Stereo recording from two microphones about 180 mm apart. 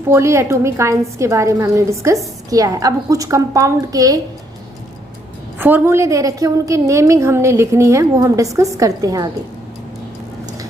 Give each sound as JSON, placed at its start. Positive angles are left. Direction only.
{"t": 0.1, "sound": "a woman's voice", "side_deg": -15}
{"t": 5.5, "sound": "a woman's voice", "side_deg": -10}